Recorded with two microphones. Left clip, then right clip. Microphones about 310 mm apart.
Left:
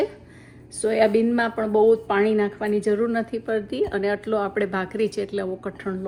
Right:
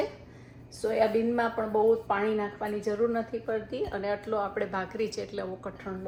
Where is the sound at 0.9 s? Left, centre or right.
Left.